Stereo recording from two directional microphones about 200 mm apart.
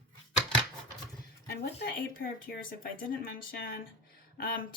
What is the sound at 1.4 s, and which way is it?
Speech, 55° left (ahead or behind).